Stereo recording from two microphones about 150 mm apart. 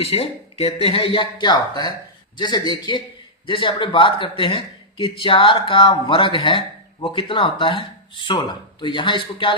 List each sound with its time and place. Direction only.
0.0 s speech: 40° left (ahead or behind)